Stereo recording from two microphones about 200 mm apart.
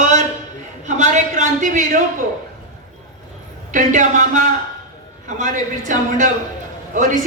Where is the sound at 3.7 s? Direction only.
40° right (ahead or behind).